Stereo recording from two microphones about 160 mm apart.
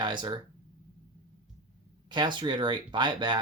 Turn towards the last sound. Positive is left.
turn(degrees=-30)  # may be behind; listen again after turning